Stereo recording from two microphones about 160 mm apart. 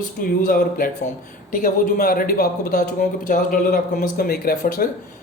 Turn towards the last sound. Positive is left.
turn(degrees=65)  # may be behind; listen again after turning